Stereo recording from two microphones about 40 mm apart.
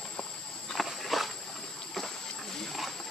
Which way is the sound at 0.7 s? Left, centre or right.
Centre.